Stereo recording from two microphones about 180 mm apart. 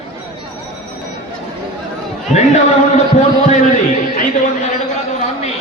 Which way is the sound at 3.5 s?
45° left (ahead or behind).